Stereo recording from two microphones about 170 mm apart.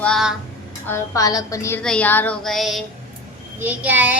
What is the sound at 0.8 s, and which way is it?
Speech, 15° left (ahead or behind).